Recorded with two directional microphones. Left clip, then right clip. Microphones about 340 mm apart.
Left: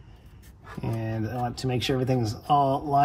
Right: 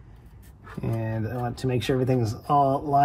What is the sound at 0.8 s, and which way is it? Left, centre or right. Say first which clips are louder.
Speech: right 1 dB; centre.